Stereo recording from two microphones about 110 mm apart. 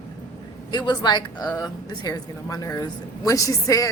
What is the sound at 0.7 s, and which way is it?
A woman's voice, 40° left (ahead or behind).